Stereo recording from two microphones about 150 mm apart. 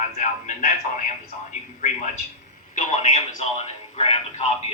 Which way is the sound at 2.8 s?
50° left (ahead or behind).